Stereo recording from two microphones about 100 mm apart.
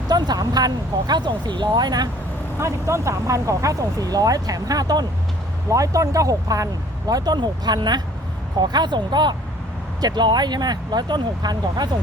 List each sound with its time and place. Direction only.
0.1 s speech: 45° right (ahead or behind)
2.6 s speech: 30° right (ahead or behind)